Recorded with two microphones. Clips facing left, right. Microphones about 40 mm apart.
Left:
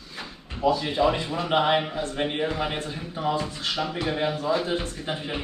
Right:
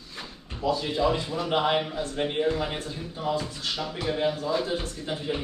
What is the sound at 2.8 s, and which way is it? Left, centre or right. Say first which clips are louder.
A man's voice: left 3 dB; left.